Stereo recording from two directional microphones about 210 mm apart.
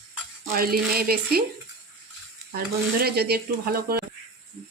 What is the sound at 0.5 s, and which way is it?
Speech, 45° right (ahead or behind).